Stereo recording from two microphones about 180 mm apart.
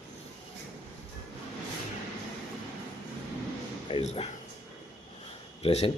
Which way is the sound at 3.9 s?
30° left (ahead or behind).